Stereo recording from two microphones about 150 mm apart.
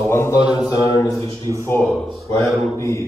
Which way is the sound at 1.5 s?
25° right (ahead or behind).